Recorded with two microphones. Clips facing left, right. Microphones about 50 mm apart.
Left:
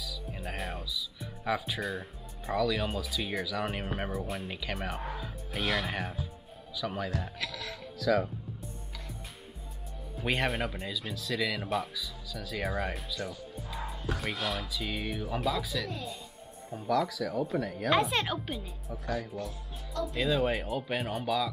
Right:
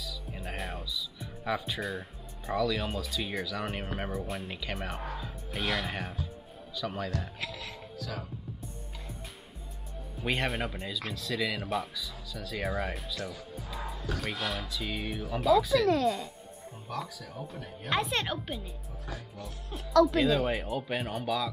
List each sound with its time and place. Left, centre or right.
0.0 s speech: centre
8.0 s speech: left
10.2 s speech: centre
15.9 s speech: right
16.8 s speech: left
17.8 s speech: centre
18.9 s speech: left
19.7 s speech: right
20.2 s speech: centre